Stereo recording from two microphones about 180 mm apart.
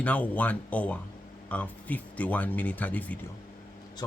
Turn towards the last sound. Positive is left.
turn(degrees=10)  # may be behind; listen again after turning